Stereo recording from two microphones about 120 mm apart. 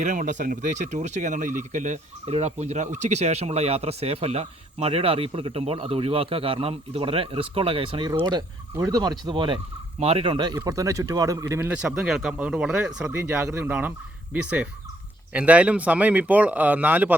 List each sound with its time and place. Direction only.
0.0 s speech: 90° right
2.3 s speech: 70° right (ahead or behind); by 9.6 s 45° right (ahead or behind)
10.0 s speech: 55° right (ahead or behind); by 11.7 s 25° right (ahead or behind)
11.7 s speech: 10° right (ahead or behind)
13.1 s speech: 20° right (ahead or behind)
15.3 s speech: 10° right (ahead or behind)